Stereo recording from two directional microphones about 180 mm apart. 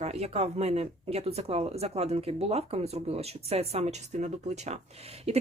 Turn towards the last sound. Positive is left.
turn(degrees=-35)  # may be behind; listen again after turning